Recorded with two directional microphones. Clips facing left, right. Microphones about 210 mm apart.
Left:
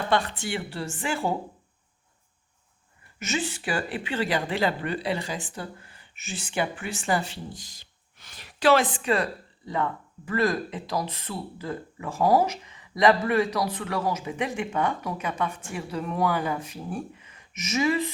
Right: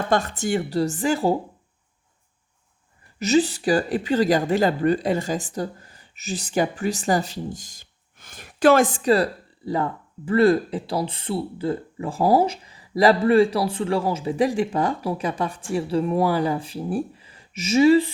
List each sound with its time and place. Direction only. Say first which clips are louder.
0.1 s speech: right 5 dB; 45° right (ahead or behind)
3.2 s speech: right 11 dB; 35° right (ahead or behind)